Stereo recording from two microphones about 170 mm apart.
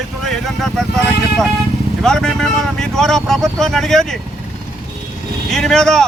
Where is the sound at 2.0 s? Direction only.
5° left (ahead or behind).